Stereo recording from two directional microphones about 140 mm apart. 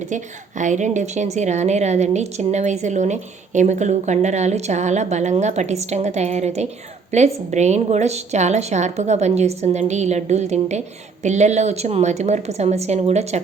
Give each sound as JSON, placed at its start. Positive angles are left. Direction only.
{"t": 0.6, "sound": "a woman's voice", "side_deg": -60}